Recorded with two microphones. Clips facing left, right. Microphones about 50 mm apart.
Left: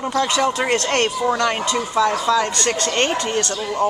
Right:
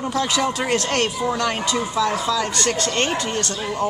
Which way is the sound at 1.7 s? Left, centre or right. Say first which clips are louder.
Left 3 dB; left.